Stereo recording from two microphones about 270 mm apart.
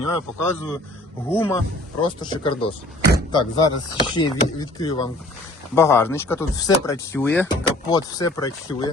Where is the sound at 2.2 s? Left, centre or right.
Centre.